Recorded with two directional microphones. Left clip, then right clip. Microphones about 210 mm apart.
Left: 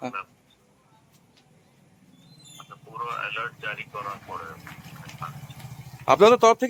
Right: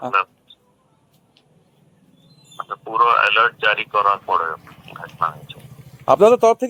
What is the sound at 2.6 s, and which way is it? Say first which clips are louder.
Speech: right 18 dB; 35° right (ahead or behind).